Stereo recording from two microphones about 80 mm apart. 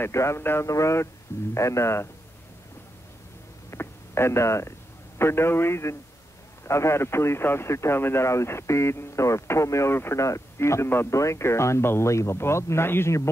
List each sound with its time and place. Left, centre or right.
0.0 s a man's voice: left
3.7 s a sound: left
5.2 s a man's voice: left